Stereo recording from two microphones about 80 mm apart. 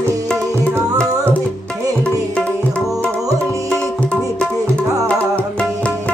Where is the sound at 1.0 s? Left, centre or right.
Centre.